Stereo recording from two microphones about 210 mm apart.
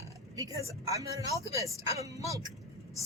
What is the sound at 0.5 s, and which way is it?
Speech, 15° right (ahead or behind).